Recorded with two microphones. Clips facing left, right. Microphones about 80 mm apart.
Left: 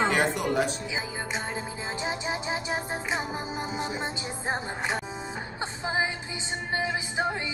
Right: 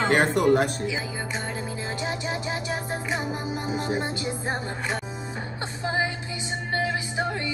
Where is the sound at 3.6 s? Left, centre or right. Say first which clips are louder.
Right 5 dB; right.